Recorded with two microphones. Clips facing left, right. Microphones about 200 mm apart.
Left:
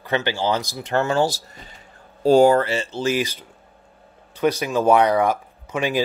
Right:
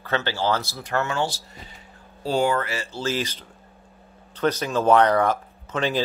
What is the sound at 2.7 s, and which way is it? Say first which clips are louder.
Speech: left 5 dB; 20° left (ahead or behind).